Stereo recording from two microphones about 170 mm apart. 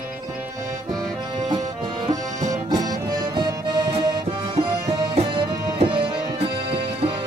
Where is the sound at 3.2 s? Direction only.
25° right (ahead or behind).